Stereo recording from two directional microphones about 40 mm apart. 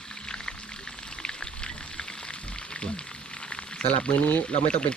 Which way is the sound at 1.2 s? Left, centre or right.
Left.